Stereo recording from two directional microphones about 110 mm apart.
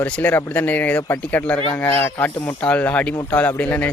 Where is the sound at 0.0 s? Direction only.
15° left (ahead or behind).